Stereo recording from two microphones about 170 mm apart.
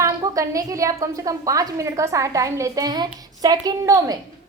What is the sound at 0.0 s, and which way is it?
A woman's voice, 20° right (ahead or behind).